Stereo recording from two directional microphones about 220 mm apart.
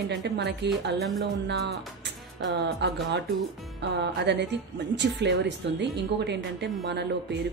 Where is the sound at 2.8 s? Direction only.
50° right (ahead or behind).